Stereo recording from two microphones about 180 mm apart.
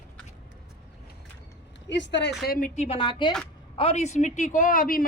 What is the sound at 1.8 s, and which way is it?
Speech, 80° left.